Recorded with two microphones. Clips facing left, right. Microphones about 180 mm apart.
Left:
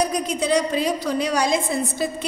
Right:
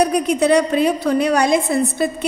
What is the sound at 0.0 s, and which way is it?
A woman's voice, 65° right (ahead or behind).